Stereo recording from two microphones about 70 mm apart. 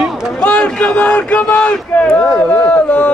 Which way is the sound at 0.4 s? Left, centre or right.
Centre.